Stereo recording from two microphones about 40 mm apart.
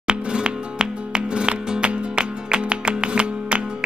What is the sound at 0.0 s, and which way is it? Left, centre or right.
Music, right.